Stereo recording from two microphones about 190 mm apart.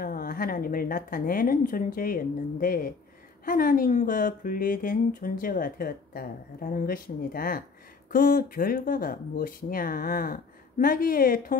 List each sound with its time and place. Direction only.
0.0 s speech: 50° left (ahead or behind)